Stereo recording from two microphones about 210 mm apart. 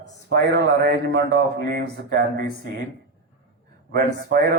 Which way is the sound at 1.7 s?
40° right (ahead or behind).